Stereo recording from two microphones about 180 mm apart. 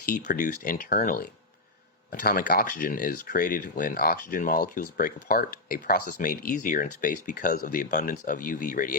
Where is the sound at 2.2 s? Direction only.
60° left (ahead or behind).